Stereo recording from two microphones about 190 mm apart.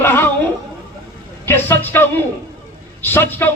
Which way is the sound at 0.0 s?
10° left (ahead or behind).